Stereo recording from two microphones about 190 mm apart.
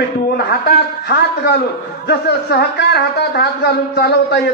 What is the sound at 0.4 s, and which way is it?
Speech, 60° left (ahead or behind).